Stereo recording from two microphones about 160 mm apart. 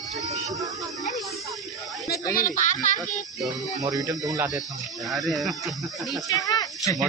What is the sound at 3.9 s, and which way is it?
Speech, 20° right (ahead or behind).